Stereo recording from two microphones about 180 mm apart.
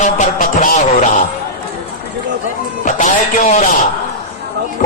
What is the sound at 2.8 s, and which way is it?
Speech, 45° left (ahead or behind).